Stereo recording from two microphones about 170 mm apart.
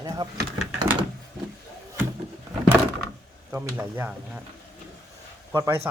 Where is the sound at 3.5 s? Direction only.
10° right (ahead or behind).